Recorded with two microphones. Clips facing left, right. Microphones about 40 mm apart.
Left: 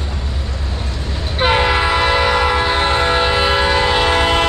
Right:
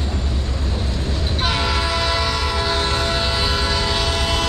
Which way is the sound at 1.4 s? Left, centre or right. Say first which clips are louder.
Left 8 dB; left.